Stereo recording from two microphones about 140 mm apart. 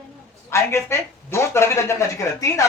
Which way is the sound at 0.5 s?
20° left (ahead or behind).